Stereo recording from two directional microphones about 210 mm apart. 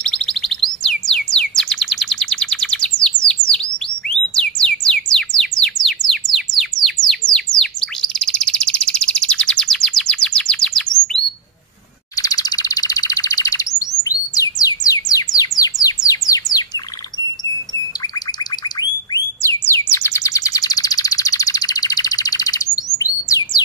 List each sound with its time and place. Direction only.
0.0 s music: 5° left (ahead or behind)
5.1 s bird: 5° left (ahead or behind)
12.2 s bird: 15° left (ahead or behind)
18.8 s bird: 15° left (ahead or behind)